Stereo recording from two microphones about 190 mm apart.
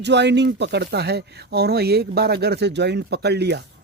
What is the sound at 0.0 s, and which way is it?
Speech, 65° right (ahead or behind).